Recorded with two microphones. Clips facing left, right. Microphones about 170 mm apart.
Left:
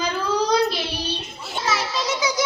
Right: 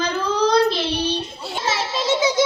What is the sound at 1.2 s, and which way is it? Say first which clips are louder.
Children playing: right 3 dB; 30° right (ahead or behind).